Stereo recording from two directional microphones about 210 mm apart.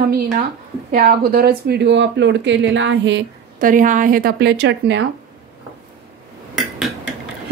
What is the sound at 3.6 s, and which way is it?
A woman's voice, 40° right (ahead or behind).